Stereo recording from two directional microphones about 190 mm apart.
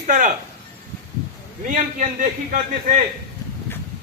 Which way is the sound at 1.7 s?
40° right (ahead or behind).